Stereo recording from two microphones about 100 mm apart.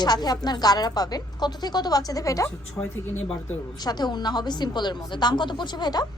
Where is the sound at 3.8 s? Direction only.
45° left (ahead or behind).